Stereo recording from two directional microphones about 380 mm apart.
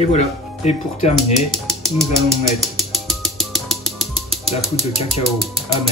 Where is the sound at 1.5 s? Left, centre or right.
Centre.